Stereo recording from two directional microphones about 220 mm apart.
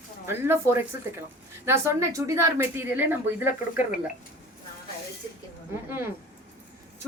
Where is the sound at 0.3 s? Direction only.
10° right (ahead or behind).